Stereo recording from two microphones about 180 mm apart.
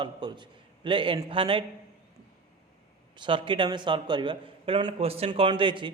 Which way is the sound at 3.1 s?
25° right (ahead or behind).